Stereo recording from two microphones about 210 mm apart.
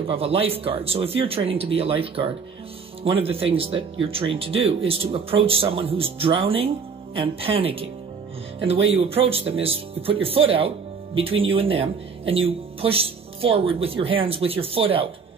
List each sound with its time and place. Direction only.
0.0 s speech: 25° right (ahead or behind)